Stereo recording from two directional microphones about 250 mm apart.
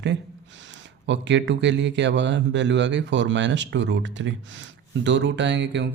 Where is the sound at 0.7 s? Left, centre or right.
Right.